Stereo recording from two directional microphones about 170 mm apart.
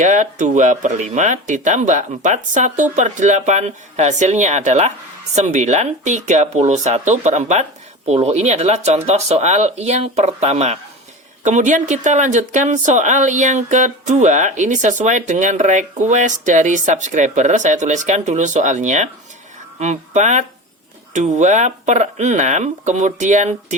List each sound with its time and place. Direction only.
0.0 s speech: 45° right (ahead or behind)